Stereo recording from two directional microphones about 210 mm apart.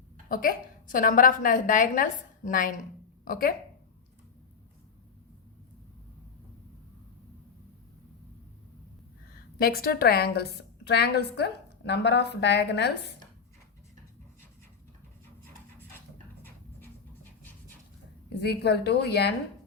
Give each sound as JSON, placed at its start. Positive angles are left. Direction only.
{"t": 0.3, "sound": "a woman's voice", "side_deg": 45}
{"t": 9.6, "sound": "a woman's voice", "side_deg": 45}
{"t": 18.4, "sound": "a woman's voice", "side_deg": 50}